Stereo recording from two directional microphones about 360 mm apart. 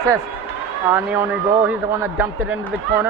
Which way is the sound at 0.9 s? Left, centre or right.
Centre.